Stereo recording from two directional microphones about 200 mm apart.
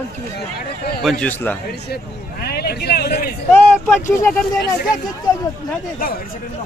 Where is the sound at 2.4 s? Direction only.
50° left (ahead or behind).